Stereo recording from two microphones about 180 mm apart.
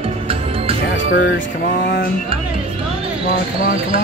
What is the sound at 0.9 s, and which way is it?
Speech, 90° left.